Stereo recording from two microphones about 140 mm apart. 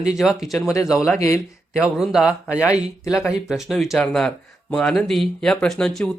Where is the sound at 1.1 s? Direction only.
20° left (ahead or behind).